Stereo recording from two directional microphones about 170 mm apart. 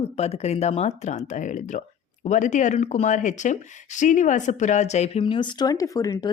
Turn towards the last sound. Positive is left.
turn(degrees=20)  # may be behind; listen again after turning